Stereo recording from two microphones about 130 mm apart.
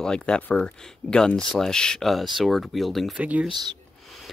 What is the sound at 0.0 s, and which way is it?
Speech, 5° left (ahead or behind).